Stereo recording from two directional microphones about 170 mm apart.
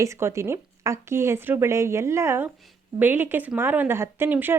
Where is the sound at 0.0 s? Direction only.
15° right (ahead or behind).